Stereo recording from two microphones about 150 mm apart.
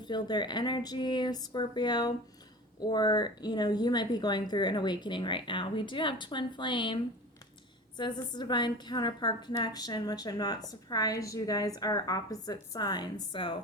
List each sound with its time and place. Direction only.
0.0 s a woman's voice: 30° left (ahead or behind)